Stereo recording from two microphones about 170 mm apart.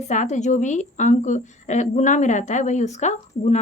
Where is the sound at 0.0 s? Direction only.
45° left (ahead or behind).